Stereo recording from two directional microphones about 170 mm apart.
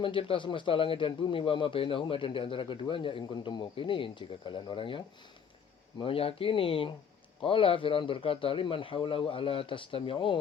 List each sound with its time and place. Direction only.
0.0 s a man's voice: 30° left (ahead or behind)